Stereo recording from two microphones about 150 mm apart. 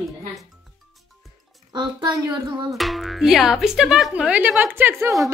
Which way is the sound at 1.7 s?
30° right (ahead or behind).